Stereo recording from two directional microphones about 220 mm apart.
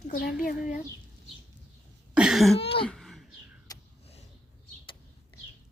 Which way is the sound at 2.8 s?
Centre (ahead or behind).